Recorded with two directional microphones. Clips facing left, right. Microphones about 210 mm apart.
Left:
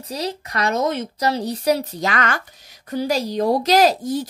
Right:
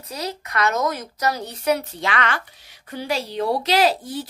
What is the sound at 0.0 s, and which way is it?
A woman's voice, 30° left (ahead or behind).